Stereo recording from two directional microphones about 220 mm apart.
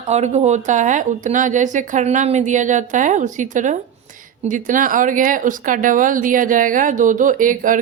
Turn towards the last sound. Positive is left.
turn(degrees=-35)  # may be behind; listen again after turning